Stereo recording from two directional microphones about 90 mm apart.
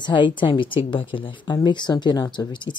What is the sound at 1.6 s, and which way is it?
Speech, 55° left (ahead or behind).